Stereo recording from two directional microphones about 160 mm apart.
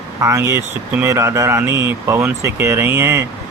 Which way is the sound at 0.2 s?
20° right (ahead or behind).